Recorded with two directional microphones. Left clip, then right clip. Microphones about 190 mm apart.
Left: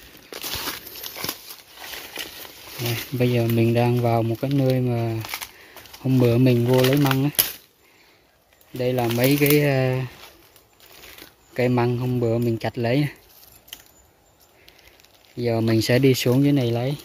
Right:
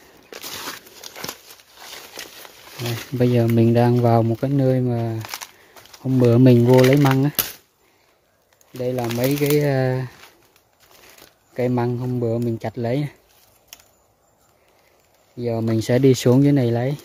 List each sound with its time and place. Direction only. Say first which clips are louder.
0.3 s a sound: left 2 dB; 5° left (ahead or behind)
3.2 s speech: right 4 dB; 30° right (ahead or behind); by 6.2 s 15° right (ahead or behind)
6.2 s speech: right 5 dB; 35° right (ahead or behind)
6.6 s speech: right 5 dB; 5° right (ahead or behind)
8.7 s speech: left 1 dB; 5° right (ahead or behind); by 10.1 s 25° right (ahead or behind)
11.5 s speech: left 1 dB; 15° right (ahead or behind)
15.3 s speech: left 1 dB; 10° right (ahead or behind); by 17.0 s 30° right (ahead or behind)